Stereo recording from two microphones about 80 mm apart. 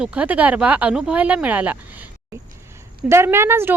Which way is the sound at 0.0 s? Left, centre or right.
Centre.